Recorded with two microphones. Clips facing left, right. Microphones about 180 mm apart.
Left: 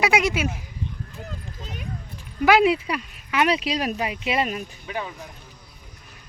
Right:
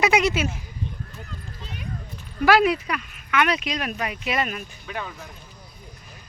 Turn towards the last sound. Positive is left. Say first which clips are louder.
# left 2 dB
turn(degrees=15)  # may be behind; listen again after turning